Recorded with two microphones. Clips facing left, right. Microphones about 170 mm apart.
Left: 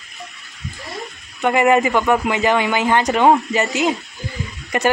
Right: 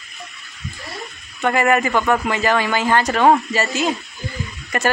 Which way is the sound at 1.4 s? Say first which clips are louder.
Left 2 dB; 15° left (ahead or behind).